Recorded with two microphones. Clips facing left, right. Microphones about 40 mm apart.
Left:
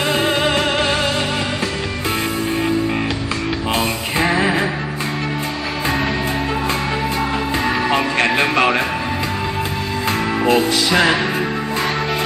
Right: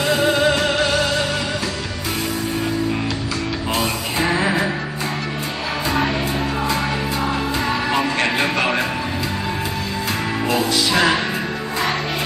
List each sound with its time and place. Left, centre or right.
0.1 s music: left
3.8 s music: left
7.9 s music: left
10.4 s music: left